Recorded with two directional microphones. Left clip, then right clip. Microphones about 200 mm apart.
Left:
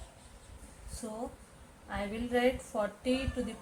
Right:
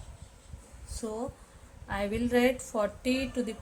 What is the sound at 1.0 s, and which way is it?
A woman's voice, 55° right (ahead or behind).